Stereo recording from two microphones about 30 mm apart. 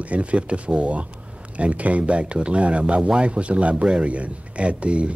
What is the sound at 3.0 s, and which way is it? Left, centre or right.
Speech, right.